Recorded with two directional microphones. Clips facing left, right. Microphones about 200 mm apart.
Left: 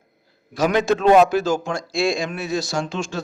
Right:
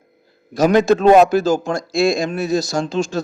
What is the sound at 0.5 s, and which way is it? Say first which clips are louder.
A man's voice: right 5 dB; 40° right (ahead or behind).